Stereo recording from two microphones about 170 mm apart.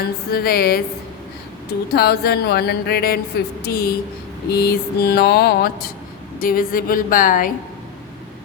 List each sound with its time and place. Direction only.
0.0 s a woman's voice: 65° left (ahead or behind)
1.9 s a woman's voice: 65° left (ahead or behind)